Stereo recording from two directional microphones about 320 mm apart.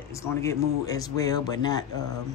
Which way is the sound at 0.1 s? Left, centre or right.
Centre.